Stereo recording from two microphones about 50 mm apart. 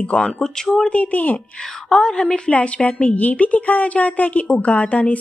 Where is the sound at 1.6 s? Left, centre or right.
Centre.